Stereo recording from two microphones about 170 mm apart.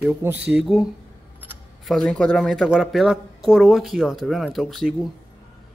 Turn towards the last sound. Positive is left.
turn(degrees=0)  # may be behind; listen again after turning